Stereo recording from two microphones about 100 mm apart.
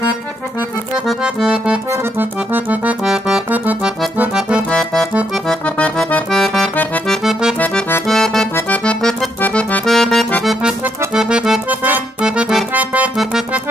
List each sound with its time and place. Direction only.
0.9 s accordion: 5° right (ahead or behind)
1.9 s accordion: 20° right (ahead or behind)
3.0 s music: 5° right (ahead or behind)
3.4 s accordion: 15° right (ahead or behind)
4.6 s accordion: 10° left (ahead or behind)
6.3 s accordion: centre (ahead or behind)
7.5 s accordion: 15° left (ahead or behind)
8.1 s accordion: 5° left (ahead or behind)
8.5 s accordion: 15° left (ahead or behind); by 11.6 s 5° right (ahead or behind)
11.7 s accordion: 15° right (ahead or behind)
12.3 s accordion: 5° right (ahead or behind)
12.7 s accordion: 15° right (ahead or behind)